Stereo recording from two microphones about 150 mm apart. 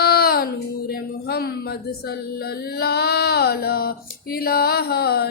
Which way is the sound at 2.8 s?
90° left.